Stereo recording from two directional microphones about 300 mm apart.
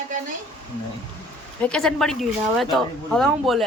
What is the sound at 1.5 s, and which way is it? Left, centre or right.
A woman's voice, centre.